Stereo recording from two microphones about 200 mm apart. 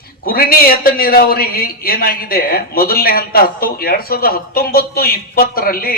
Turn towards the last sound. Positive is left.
turn(degrees=45)  # may be behind; listen again after turning